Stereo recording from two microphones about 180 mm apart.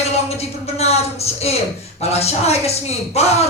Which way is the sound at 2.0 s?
35° left (ahead or behind).